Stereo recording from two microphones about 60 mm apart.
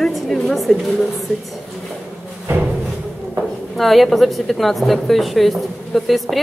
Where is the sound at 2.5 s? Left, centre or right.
Right.